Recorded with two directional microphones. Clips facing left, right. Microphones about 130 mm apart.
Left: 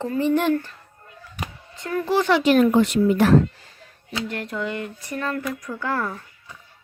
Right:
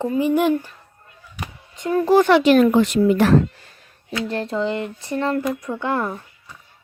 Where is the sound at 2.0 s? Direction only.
45° right (ahead or behind).